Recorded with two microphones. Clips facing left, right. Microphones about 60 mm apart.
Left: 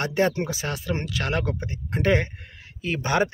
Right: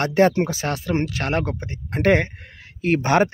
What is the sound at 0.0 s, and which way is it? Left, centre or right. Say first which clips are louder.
Speech: right 6 dB; right.